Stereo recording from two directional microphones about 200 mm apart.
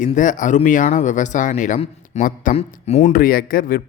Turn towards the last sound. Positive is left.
turn(degrees=45)  # may be behind; listen again after turning